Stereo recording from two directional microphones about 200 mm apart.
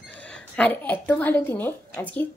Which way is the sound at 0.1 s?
5° left (ahead or behind).